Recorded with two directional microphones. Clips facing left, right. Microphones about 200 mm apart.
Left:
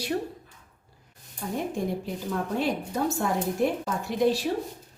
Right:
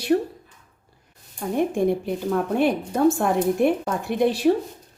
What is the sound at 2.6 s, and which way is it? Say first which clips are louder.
A woman's voice: right 8 dB; 55° right (ahead or behind).